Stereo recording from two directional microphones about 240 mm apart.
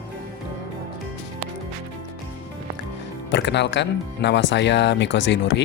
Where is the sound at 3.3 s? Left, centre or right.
Left.